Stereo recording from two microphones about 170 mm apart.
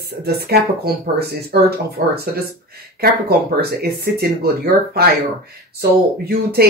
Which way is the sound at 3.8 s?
65° right (ahead or behind).